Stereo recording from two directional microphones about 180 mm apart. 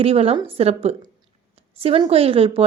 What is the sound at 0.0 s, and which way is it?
A woman's voice, 35° right (ahead or behind).